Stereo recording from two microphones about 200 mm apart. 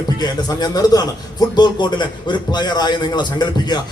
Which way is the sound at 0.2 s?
20° left (ahead or behind).